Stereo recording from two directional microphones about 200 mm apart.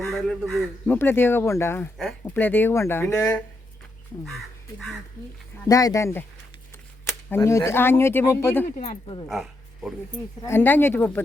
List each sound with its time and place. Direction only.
0.0 s speech: centre (ahead or behind)
5.6 s speech: 15° left (ahead or behind)
7.3 s speech: 15° left (ahead or behind)
8.8 s speech: 25° left (ahead or behind)
9.2 s dog: centre (ahead or behind)
10.4 s speech: 10° left (ahead or behind)